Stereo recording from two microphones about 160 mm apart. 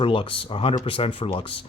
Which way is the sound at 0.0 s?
35° left (ahead or behind).